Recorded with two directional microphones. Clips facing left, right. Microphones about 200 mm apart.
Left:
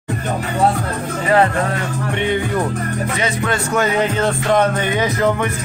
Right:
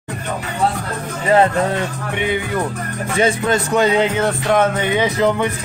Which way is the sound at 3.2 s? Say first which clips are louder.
Right 6 dB; 25° right (ahead or behind).